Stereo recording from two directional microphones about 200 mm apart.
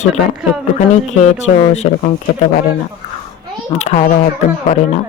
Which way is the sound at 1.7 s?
35° left (ahead or behind).